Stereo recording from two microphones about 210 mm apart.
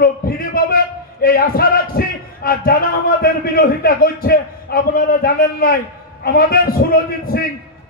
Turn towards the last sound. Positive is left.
turn(degrees=45)  # may be behind; listen again after turning